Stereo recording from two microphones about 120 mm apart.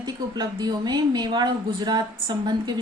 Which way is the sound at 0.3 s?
35° right (ahead or behind).